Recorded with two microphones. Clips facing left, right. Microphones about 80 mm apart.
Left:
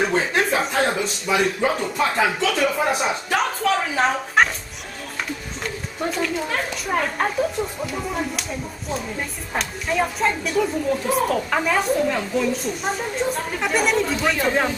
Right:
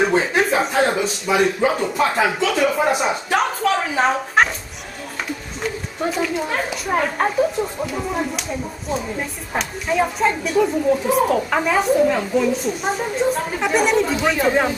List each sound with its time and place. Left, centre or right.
0.0 s speech: centre
5.6 s a woman's voice: centre